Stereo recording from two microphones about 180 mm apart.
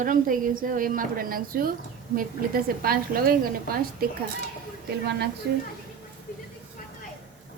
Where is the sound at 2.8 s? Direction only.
55° right (ahead or behind).